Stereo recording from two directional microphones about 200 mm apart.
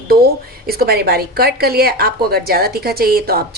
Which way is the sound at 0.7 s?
50° right (ahead or behind).